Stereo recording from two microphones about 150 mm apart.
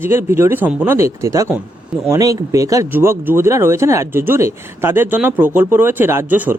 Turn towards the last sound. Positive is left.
turn(degrees=-10)  # may be behind; listen again after turning